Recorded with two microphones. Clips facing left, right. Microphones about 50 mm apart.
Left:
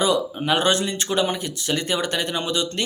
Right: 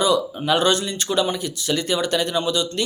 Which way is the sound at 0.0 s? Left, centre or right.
Left.